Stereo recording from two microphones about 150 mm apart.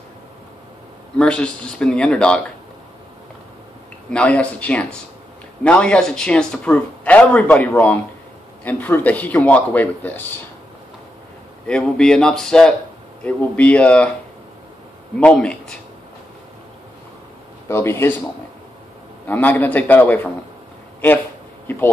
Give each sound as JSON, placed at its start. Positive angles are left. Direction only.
{"t": 1.1, "sound": "a man's voice", "side_deg": 5}
{"t": 4.1, "sound": "a man's voice", "side_deg": 10}
{"t": 11.6, "sound": "a man's voice", "side_deg": 5}
{"t": 15.1, "sound": "a man's voice", "side_deg": 5}
{"t": 17.6, "sound": "a man's voice", "side_deg": 15}
{"t": 19.2, "sound": "a man's voice", "side_deg": 10}